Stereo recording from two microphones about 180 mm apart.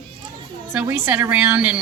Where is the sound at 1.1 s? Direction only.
10° right (ahead or behind).